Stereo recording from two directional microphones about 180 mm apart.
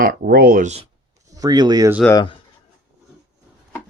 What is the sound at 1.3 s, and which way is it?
Speech, 20° right (ahead or behind).